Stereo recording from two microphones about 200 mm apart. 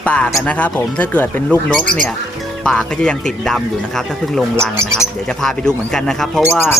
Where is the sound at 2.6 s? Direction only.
5° left (ahead or behind).